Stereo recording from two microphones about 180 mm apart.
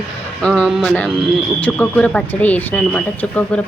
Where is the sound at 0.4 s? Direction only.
5° left (ahead or behind).